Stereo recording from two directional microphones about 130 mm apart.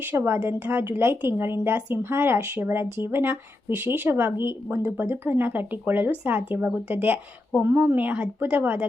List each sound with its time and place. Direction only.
0.0 s speech: 15° right (ahead or behind)